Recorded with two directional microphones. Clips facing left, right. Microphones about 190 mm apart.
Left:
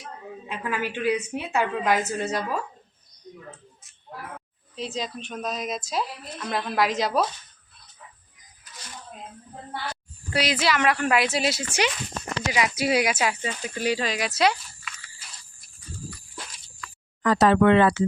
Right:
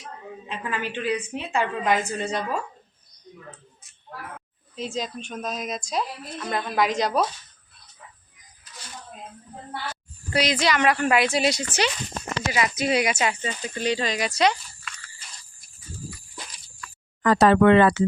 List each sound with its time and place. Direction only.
0.4 s a woman's voice: 10° left (ahead or behind)
4.7 s speech: centre (ahead or behind)
10.3 s speech: 5° left (ahead or behind)
15.6 s dog: centre (ahead or behind)
17.2 s speech: 55° right (ahead or behind)